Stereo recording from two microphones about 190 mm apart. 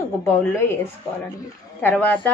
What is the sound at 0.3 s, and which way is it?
Speech, 15° left (ahead or behind).